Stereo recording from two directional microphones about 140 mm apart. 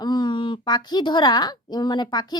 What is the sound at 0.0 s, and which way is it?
A woman's voice, 30° left (ahead or behind).